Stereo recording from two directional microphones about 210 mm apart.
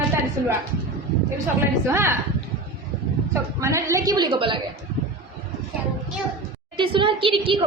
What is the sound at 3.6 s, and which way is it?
A woman's voice, 15° right (ahead or behind).